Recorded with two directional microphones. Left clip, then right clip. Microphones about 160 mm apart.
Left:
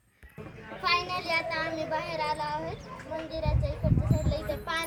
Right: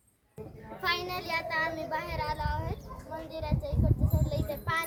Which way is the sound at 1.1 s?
5° right (ahead or behind).